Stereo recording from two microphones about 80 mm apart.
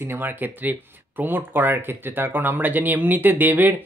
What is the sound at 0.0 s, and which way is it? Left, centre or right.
Speech, right.